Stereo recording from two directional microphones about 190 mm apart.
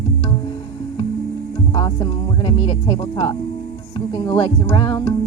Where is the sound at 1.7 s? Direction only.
20° left (ahead or behind).